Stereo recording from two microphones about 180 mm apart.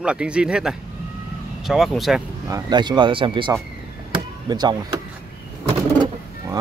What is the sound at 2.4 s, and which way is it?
Speech, 20° right (ahead or behind).